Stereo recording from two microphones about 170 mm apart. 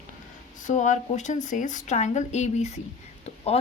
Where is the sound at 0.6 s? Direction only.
45° left (ahead or behind).